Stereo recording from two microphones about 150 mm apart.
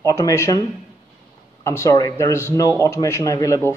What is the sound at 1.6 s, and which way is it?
A man's voice, 20° left (ahead or behind).